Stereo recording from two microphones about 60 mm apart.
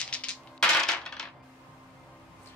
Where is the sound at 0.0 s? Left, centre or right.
Centre.